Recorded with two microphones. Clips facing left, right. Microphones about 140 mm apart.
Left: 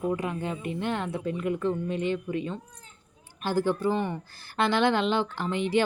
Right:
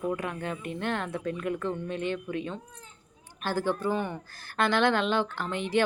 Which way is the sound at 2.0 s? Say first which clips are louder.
Left 3 dB; 55° right (ahead or behind).